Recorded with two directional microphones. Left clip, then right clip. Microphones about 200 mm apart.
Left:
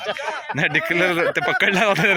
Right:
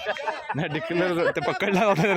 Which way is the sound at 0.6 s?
5° left (ahead or behind).